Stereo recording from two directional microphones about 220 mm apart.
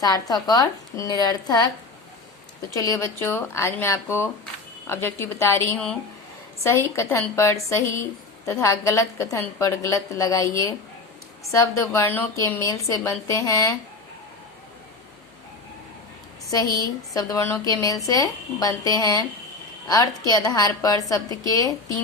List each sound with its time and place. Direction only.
0.0 s a woman's voice: 15° left (ahead or behind)
2.7 s a woman's voice: 15° left (ahead or behind)
17.2 s a woman's voice: 10° left (ahead or behind)